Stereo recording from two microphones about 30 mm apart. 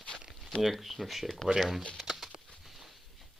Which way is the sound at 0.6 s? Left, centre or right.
Centre.